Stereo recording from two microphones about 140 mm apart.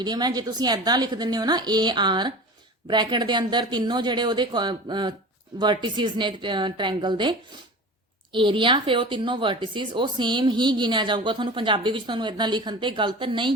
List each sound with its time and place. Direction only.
0.0 s a woman's voice: 30° right (ahead or behind)